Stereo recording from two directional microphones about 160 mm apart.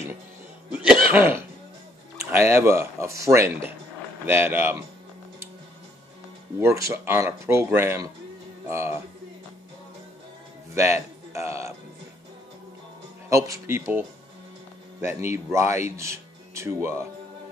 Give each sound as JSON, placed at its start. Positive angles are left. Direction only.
{"t": 0.7, "sound": "speech", "side_deg": -5}
{"t": 6.6, "sound": "speech", "side_deg": -20}
{"t": 10.7, "sound": "speech", "side_deg": -15}
{"t": 13.5, "sound": "speech", "side_deg": -15}